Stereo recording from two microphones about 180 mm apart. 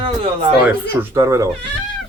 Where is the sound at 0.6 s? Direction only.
15° right (ahead or behind).